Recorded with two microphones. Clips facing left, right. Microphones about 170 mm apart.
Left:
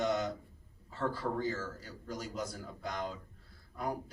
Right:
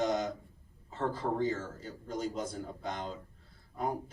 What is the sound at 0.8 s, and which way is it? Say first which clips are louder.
Speech: right 2 dB; 25° right (ahead or behind).